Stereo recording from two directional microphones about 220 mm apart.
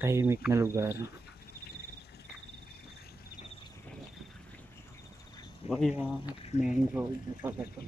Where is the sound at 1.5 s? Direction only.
45° left (ahead or behind).